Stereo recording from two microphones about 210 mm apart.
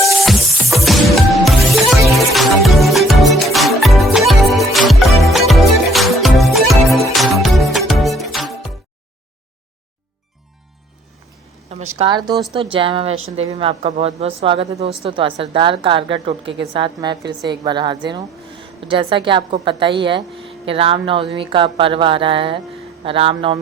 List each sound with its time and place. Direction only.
0.3 s music: centre (ahead or behind)
11.7 s a woman's voice: 30° right (ahead or behind)